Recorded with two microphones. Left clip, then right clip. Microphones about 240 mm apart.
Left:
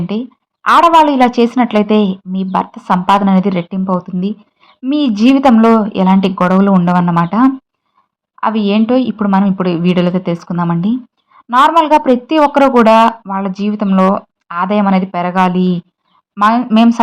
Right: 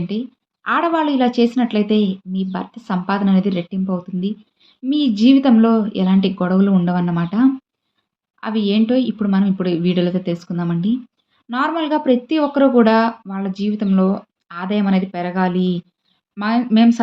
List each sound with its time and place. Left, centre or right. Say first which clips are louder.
0.7 s speech: left 10 dB; left